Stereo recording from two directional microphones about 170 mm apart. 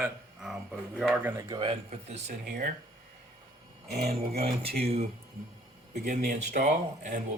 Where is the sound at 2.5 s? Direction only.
60° right (ahead or behind).